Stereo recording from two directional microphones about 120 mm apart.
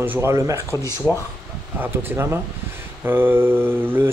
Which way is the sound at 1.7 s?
20° right (ahead or behind).